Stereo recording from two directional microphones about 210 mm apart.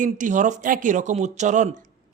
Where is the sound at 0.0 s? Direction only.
35° right (ahead or behind).